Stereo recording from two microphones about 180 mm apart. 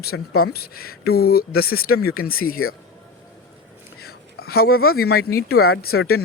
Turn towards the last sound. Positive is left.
turn(degrees=60)  # may be behind; listen again after turning